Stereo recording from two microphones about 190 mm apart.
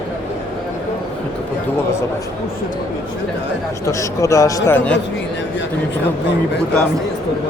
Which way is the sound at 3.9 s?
15° left (ahead or behind).